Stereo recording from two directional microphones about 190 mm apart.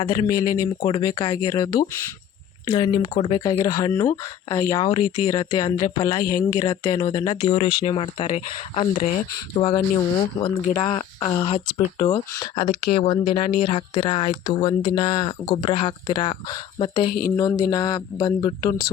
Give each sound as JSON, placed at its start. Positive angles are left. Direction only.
{"t": 0.0, "sound": "speech", "side_deg": 30}
{"t": 0.3, "sound": "speech", "side_deg": 20}
{"t": 4.9, "sound": "speech", "side_deg": 30}
{"t": 9.6, "sound": "speech", "side_deg": 25}
{"t": 11.5, "sound": "speech", "side_deg": 40}
{"t": 12.0, "sound": "speech", "side_deg": 20}
{"t": 17.3, "sound": "a sound", "side_deg": 15}
{"t": 17.6, "sound": "speech", "side_deg": 20}